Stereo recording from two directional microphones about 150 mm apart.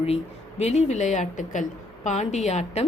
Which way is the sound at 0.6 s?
45° left (ahead or behind).